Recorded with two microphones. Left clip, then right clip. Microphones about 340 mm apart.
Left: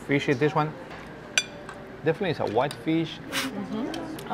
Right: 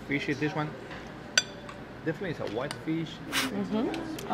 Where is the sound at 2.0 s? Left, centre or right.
Left.